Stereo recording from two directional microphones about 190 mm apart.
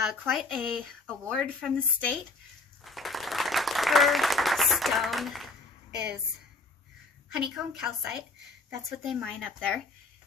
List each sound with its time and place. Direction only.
0.3 s speech: centre (ahead or behind)
2.8 s applause: centre (ahead or behind)
7.3 s speech: 5° right (ahead or behind)